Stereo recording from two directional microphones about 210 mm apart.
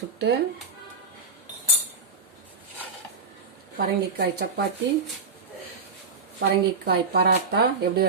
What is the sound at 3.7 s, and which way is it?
Speech, 50° right (ahead or behind).